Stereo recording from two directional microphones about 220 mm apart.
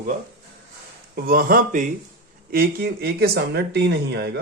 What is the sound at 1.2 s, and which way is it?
Speech, 40° right (ahead or behind).